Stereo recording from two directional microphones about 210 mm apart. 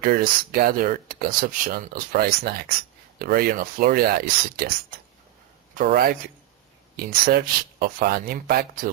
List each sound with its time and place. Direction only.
0.0 s speech: 45° right (ahead or behind)
5.7 s speech: 45° right (ahead or behind)
7.3 s speech: 45° right (ahead or behind)